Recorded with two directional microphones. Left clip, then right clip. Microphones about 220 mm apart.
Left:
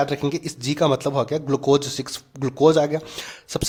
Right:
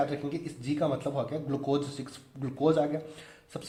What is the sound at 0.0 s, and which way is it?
Speech, 35° left (ahead or behind).